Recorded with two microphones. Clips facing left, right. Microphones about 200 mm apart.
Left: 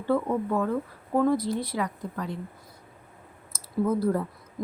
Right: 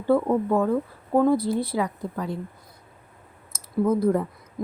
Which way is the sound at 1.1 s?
30° right (ahead or behind).